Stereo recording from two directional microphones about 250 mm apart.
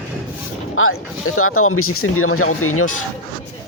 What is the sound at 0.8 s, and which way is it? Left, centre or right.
Speech, left.